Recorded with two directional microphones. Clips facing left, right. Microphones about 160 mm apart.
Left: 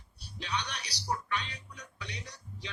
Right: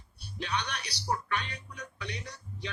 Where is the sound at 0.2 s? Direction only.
55° right (ahead or behind).